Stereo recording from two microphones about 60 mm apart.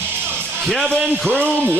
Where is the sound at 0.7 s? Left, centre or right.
Centre.